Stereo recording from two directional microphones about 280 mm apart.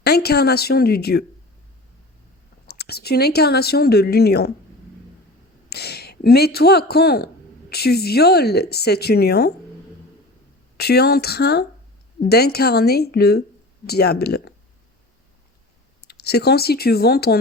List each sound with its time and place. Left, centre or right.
0.0 s speech: left
2.6 s speech: left
5.6 s a man's voice: left
10.8 s speech: left
16.0 s speech: left